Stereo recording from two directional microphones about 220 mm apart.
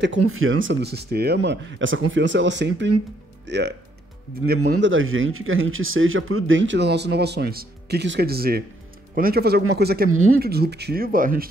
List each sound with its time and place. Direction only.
0.2 s speech: 70° right (ahead or behind); by 11.4 s 40° right (ahead or behind)